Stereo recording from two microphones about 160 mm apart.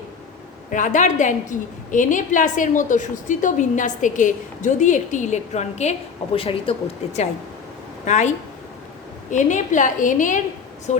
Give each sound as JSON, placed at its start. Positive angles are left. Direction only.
{"t": 0.7, "sound": "a woman's voice", "side_deg": 50}